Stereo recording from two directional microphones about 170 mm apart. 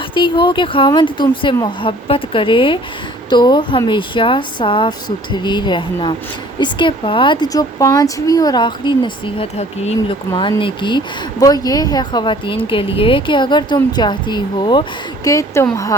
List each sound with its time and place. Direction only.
0.1 s speech: 30° left (ahead or behind)